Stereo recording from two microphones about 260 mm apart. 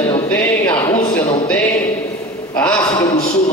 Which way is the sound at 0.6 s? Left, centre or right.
Centre.